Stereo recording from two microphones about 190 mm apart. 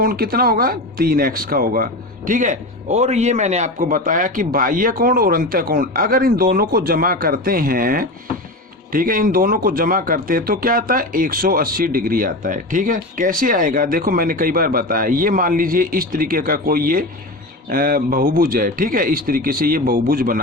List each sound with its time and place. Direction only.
0.0 s speech: 50° right (ahead or behind)